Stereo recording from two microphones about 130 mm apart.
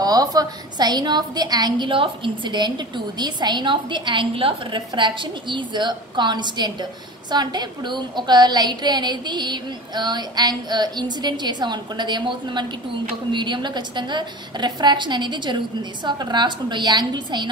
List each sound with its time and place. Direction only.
0.0 s a woman's voice: 30° right (ahead or behind)